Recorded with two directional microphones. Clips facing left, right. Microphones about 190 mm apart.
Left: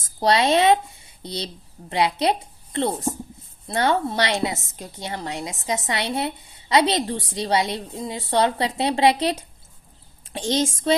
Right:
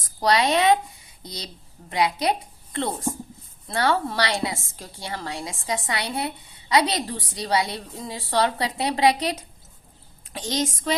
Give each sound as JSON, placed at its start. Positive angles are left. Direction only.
{"t": 0.0, "sound": "a woman's voice", "side_deg": 25}